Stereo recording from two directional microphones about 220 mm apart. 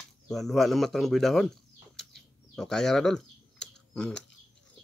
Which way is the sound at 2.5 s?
Centre (ahead or behind).